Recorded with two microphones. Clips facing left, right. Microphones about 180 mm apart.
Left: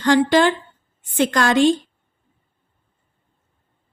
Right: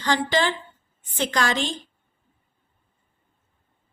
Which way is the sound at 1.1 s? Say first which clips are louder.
Left 6 dB; 55° left (ahead or behind).